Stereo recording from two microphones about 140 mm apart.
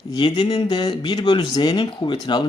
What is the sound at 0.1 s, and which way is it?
Speech, 35° left (ahead or behind).